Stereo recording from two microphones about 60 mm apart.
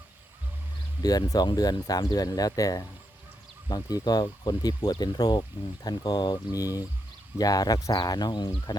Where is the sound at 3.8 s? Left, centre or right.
Left.